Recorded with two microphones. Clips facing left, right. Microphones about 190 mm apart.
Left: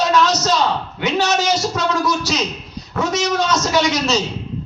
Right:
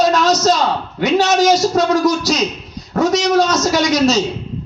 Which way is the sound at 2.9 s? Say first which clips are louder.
Right 6 dB; 40° right (ahead or behind).